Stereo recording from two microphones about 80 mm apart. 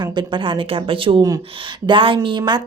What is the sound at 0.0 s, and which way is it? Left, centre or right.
Speech, right.